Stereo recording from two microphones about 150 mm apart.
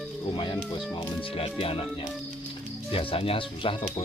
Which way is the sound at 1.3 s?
40° left (ahead or behind).